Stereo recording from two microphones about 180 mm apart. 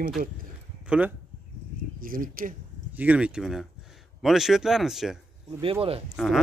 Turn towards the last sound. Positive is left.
turn(degrees=0)  # may be behind; listen again after turning